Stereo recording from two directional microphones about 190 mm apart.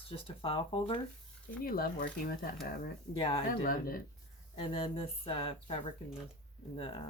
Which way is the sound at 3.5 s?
50° left (ahead or behind).